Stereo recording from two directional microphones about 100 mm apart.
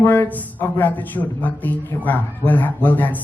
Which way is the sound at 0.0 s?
20° left (ahead or behind).